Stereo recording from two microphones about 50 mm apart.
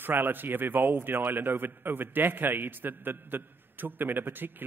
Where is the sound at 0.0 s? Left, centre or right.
Right.